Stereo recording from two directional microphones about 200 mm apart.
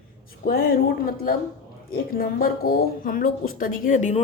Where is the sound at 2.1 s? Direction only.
50° left (ahead or behind).